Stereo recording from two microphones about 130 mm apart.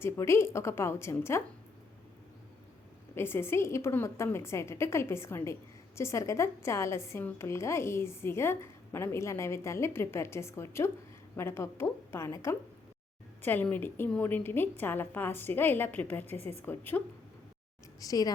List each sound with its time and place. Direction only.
0.0 s a woman's voice: 20° left (ahead or behind)
3.2 s a woman's voice: 20° left (ahead or behind)
18.0 s a woman's voice: 25° left (ahead or behind)